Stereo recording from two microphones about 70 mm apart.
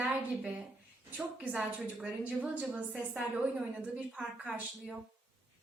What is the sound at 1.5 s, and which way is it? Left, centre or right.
A woman's voice, centre.